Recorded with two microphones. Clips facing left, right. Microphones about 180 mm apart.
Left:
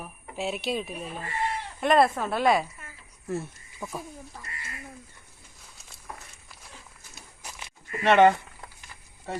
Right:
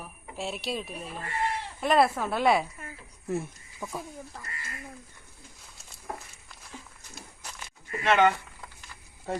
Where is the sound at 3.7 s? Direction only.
Centre (ahead or behind).